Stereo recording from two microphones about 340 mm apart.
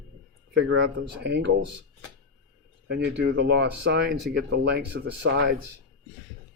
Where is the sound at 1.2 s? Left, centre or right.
Right.